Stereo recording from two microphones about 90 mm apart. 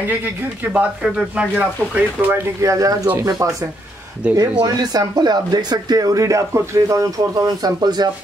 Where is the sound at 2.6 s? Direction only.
35° right (ahead or behind).